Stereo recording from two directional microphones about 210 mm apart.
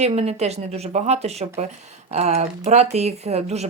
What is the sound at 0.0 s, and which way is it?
Speech, 30° right (ahead or behind).